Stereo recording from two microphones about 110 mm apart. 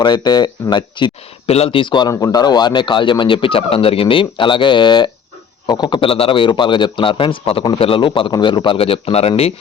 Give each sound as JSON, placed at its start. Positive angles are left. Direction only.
{"t": 0.0, "sound": "speech", "side_deg": 40}
{"t": 1.5, "sound": "speech", "side_deg": 70}